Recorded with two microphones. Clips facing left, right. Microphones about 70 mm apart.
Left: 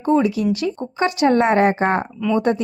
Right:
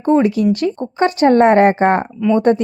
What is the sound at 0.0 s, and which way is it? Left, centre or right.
Speech, right.